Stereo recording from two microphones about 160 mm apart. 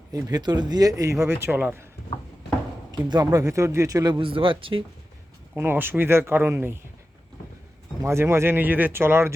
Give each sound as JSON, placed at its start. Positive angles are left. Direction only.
{"t": 0.1, "sound": "speech", "side_deg": -20}
{"t": 3.1, "sound": "speech", "side_deg": -25}
{"t": 5.5, "sound": "speech", "side_deg": -15}
{"t": 8.0, "sound": "speech", "side_deg": -15}